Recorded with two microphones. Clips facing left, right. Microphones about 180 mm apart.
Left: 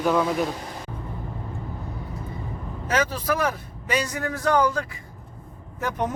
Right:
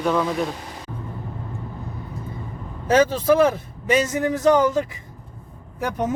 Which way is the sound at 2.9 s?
25° right (ahead or behind).